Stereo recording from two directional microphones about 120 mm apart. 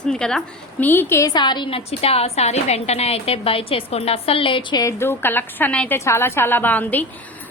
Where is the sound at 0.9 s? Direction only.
15° left (ahead or behind).